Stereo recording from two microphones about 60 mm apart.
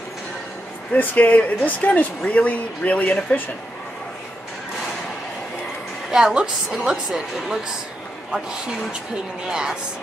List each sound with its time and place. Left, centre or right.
0.9 s speech: left
6.1 s a woman's voice: centre
9.5 s a woman's voice: centre